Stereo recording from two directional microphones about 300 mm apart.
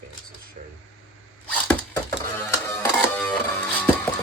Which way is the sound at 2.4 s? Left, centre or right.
Centre.